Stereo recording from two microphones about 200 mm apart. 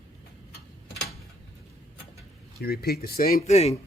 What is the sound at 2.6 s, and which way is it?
Speech, 50° left (ahead or behind).